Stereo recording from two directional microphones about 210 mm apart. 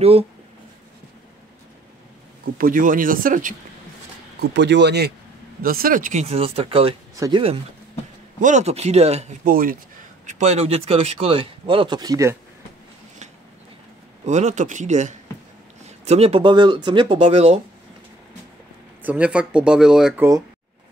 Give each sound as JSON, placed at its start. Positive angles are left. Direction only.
{"t": 2.5, "sound": "speech", "side_deg": -40}
{"t": 4.4, "sound": "speech", "side_deg": -55}
{"t": 8.4, "sound": "speech", "side_deg": -35}
{"t": 10.2, "sound": "speech", "side_deg": -30}
{"t": 14.2, "sound": "speech", "side_deg": -35}
{"t": 19.0, "sound": "speech", "side_deg": -5}